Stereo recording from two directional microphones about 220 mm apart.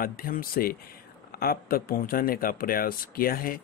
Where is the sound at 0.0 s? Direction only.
40° left (ahead or behind).